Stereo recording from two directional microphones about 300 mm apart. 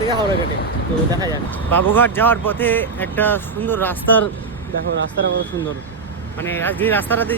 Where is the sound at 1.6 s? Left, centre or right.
Centre.